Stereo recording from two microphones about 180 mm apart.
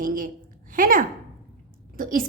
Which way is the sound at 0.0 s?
50° right (ahead or behind).